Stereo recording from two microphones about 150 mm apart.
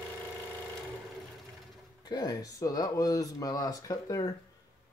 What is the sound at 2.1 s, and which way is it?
Speech, 25° left (ahead or behind).